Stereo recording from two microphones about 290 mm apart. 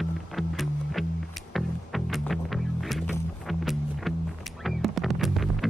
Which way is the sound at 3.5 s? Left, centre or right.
Centre.